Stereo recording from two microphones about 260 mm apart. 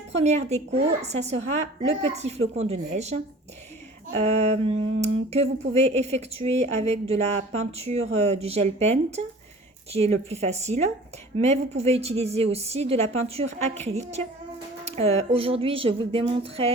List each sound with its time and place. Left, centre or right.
0.1 s speech: right